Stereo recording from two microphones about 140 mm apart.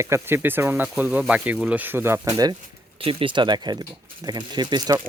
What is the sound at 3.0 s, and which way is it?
Speech, 40° right (ahead or behind).